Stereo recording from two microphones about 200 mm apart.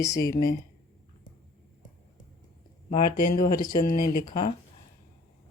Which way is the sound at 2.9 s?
45° left (ahead or behind).